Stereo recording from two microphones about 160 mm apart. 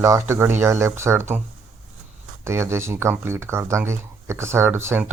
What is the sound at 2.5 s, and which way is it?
Speech, 15° right (ahead or behind).